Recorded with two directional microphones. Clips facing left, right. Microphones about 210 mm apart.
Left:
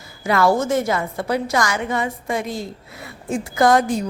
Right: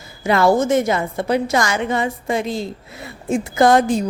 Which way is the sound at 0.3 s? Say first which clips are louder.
Right 3 dB; 25° right (ahead or behind).